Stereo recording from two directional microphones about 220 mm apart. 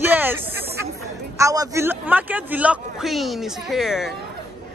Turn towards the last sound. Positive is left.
turn(degrees=0)  # may be behind; listen again after turning